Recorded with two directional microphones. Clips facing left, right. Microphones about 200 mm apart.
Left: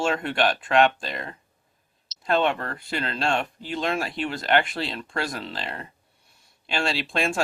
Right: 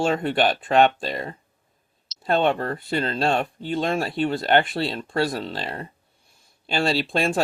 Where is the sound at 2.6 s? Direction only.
35° right (ahead or behind).